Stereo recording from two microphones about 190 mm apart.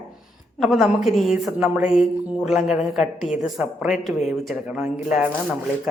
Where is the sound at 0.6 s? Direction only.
Centre (ahead or behind).